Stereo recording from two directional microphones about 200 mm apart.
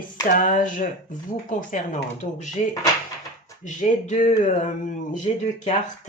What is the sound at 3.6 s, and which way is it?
Speech, 35° left (ahead or behind).